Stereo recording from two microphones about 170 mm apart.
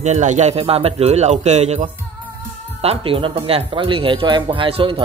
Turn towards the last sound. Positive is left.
turn(degrees=-35)  # may be behind; listen again after turning